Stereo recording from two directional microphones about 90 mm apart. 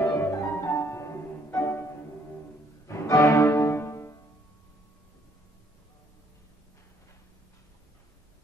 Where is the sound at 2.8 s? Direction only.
35° left (ahead or behind).